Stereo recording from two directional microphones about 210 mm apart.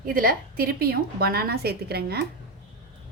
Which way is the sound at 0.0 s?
40° right (ahead or behind).